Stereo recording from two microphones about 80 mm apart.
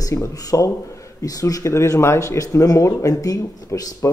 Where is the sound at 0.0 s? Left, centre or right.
Left.